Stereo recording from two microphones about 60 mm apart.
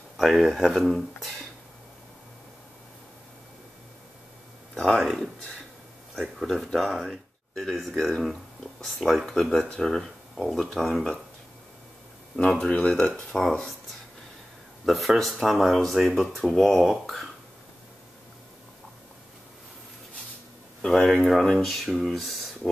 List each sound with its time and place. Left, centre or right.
0.2 s speech: centre
4.7 s speech: centre
5.0 s speech: centre
6.4 s speech: centre
12.4 s speech: left
12.9 s speech: centre
14.9 s speech: centre
20.8 s speech: centre